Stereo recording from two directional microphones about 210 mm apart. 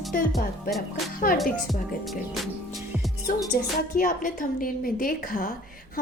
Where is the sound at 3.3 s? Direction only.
40° left (ahead or behind).